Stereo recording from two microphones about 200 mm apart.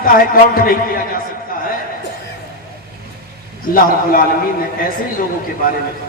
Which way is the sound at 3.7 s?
45° left (ahead or behind).